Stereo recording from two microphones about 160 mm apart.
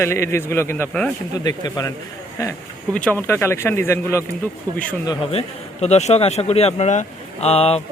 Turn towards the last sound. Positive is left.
turn(degrees=40)  # may be behind; listen again after turning